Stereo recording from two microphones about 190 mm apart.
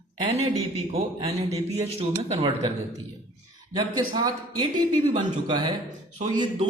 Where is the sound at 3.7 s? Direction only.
20° right (ahead or behind).